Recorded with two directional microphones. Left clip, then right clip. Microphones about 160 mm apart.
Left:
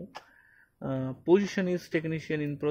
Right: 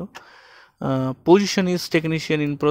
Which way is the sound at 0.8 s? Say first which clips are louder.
Right 10 dB; 35° right (ahead or behind).